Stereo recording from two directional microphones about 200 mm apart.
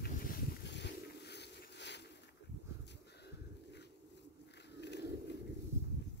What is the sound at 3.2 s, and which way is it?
Bird, 60° left (ahead or behind).